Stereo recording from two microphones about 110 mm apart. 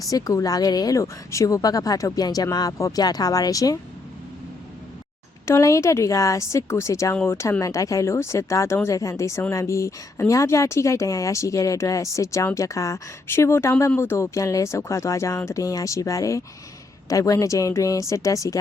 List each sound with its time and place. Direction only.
0.1 s a woman's voice: 35° left (ahead or behind)
5.5 s a woman's voice: 25° left (ahead or behind)